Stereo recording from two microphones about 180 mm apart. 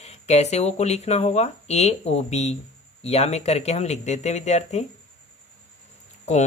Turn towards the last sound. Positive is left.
turn(degrees=40)  # may be behind; listen again after turning